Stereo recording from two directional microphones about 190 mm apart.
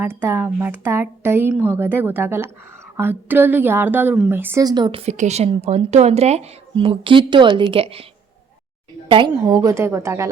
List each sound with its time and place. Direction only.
0.0 s a woman's voice: 10° right (ahead or behind); by 8.0 s 30° right (ahead or behind)
9.0 s speech: 25° right (ahead or behind)